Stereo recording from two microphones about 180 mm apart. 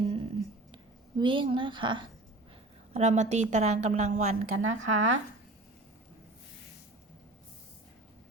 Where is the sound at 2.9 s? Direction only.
40° right (ahead or behind).